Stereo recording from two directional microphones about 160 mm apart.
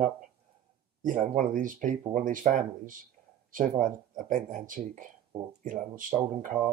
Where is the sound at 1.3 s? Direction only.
55° right (ahead or behind).